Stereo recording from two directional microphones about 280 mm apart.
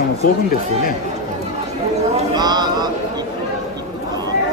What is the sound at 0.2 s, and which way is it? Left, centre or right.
Speech, left.